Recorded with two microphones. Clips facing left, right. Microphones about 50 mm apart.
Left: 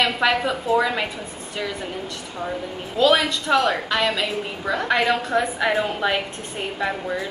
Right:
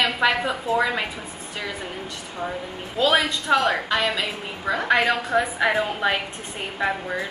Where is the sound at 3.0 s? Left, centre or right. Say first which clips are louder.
Left 2 dB; centre.